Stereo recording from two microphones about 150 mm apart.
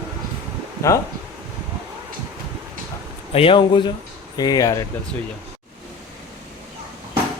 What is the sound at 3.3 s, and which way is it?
A man's voice, 40° left (ahead or behind).